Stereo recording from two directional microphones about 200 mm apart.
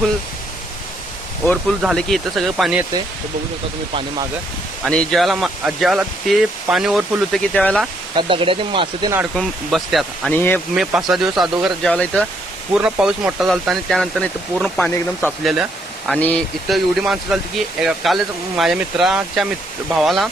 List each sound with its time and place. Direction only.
1.5 s speech: centre (ahead or behind)
4.9 s speech: centre (ahead or behind)
8.1 s speech: 25° right (ahead or behind)
9.3 s speech: centre (ahead or behind)
10.8 s speech: centre (ahead or behind)